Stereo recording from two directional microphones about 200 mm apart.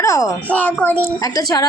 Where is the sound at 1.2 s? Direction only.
20° left (ahead or behind).